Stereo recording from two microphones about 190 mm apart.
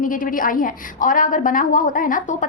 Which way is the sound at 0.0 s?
45° left (ahead or behind).